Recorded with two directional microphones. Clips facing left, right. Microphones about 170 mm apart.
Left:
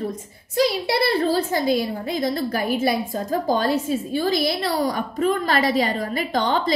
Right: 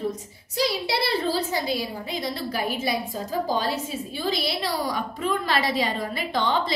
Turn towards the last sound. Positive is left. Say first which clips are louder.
# left 3 dB
turn(degrees=45)  # may be behind; listen again after turning